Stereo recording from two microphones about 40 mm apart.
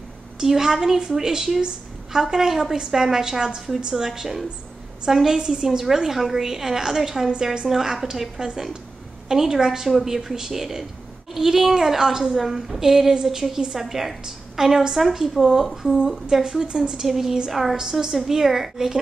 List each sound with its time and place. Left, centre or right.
0.4 s a woman's voice: centre